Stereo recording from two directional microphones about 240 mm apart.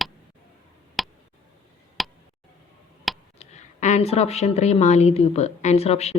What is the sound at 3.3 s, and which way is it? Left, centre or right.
A woman's voice, left.